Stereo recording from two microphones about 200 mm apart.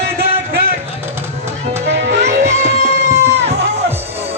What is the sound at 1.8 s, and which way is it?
Music, 60° right (ahead or behind).